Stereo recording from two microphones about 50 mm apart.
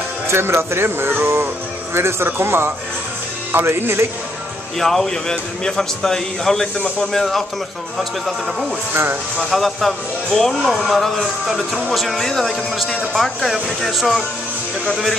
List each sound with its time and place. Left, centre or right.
0.3 s speech: right
4.7 s a man's voice: centre
9.4 s speech: centre